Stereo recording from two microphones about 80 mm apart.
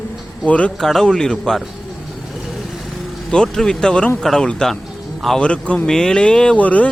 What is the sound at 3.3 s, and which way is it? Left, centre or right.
A man's voice, centre.